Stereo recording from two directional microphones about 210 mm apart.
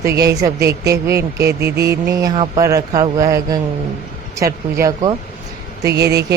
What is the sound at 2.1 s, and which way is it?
Speech, 15° right (ahead or behind).